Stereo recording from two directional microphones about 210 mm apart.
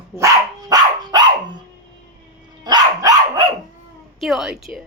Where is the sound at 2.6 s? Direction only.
20° right (ahead or behind).